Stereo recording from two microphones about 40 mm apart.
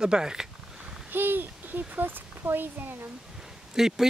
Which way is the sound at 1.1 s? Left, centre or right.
Right.